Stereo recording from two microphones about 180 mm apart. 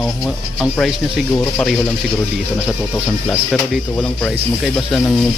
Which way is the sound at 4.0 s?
5° left (ahead or behind).